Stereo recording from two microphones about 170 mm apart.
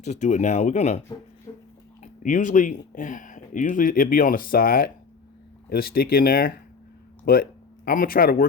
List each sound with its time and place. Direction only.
0.0 s speech: 40° left (ahead or behind)
1.5 s a sound: 25° left (ahead or behind)
2.0 s speech: 50° left (ahead or behind)